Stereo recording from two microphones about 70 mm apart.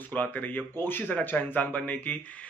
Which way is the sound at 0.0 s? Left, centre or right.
Left.